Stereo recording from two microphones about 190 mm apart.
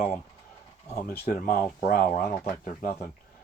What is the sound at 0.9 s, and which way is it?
Speech, 35° left (ahead or behind).